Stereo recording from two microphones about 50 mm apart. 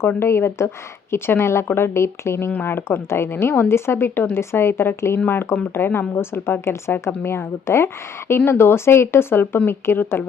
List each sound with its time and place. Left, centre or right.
0.2 s speech: left
2.6 s speech: left